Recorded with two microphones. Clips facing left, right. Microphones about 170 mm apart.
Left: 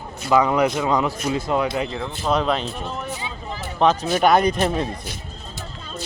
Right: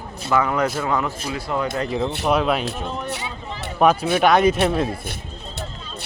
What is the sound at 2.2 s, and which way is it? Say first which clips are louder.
A man's voice: even; 10° right (ahead or behind).